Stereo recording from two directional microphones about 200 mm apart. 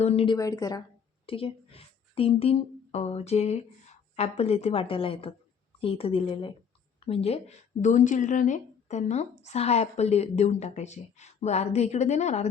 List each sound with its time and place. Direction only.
0.0 s a woman's voice: 30° left (ahead or behind)
0.3 s a woman's voice: 15° left (ahead or behind); by 12.5 s 35° left (ahead or behind)